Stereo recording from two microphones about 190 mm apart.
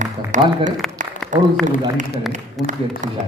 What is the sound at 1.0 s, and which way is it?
Applause, 40° right (ahead or behind).